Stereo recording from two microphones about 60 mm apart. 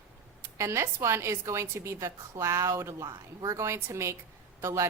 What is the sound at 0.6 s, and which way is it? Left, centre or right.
A woman's voice, right.